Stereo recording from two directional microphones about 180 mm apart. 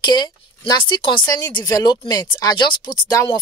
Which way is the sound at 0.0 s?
25° left (ahead or behind).